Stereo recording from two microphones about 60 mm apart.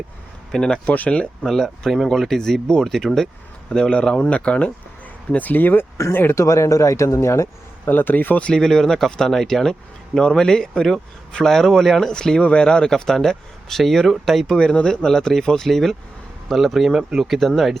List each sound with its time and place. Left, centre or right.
0.5 s speech: centre
0.9 s speech: left
1.5 s speech: centre; by 5.8 s left
6.3 s speech: left
7.9 s speech: left; by 14.5 s centre
14.5 s speech: centre